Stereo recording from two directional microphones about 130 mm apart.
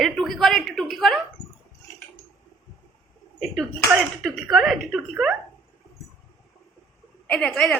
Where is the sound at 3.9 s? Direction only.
Centre (ahead or behind).